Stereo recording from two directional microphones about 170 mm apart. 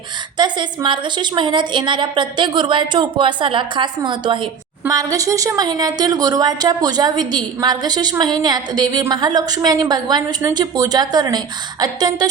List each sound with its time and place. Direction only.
0.3 s a woman's voice: 25° right (ahead or behind)